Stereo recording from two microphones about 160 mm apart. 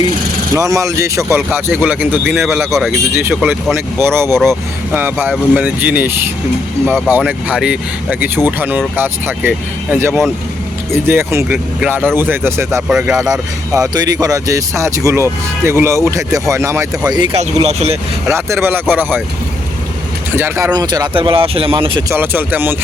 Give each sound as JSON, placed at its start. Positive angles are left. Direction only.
{"t": 0.5, "sound": "speech", "side_deg": -20}
{"t": 1.4, "sound": "speech", "side_deg": -5}
{"t": 2.2, "sound": "speech", "side_deg": 0}
{"t": 3.2, "sound": "speech", "side_deg": -10}
{"t": 13.7, "sound": "speech", "side_deg": -25}
{"t": 17.3, "sound": "speech", "side_deg": -40}
{"t": 18.3, "sound": "speech", "side_deg": -15}
{"t": 20.3, "sound": "speech", "side_deg": -15}
{"t": 20.7, "sound": "speech", "side_deg": -25}
{"t": 22.1, "sound": "speech", "side_deg": -15}